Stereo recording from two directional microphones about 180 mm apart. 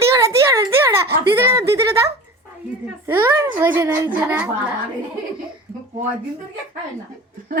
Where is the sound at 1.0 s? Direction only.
60° right (ahead or behind).